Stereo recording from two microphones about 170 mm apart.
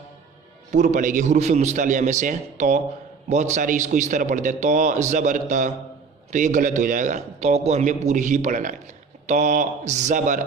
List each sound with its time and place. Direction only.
0.7 s a man's voice: 45° right (ahead or behind)
7.3 s a man's voice: 40° right (ahead or behind)